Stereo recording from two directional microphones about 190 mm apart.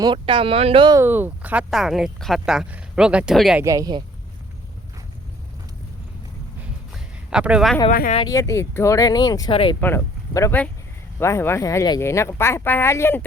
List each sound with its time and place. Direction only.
0.0 s speech: 25° right (ahead or behind)
1.0 s speech: 10° right (ahead or behind)
3.6 s speech: 15° right (ahead or behind)
6.9 s a sound: 5° right (ahead or behind)
7.9 s speech: 45° left (ahead or behind)
8.2 s speech: 15° left (ahead or behind)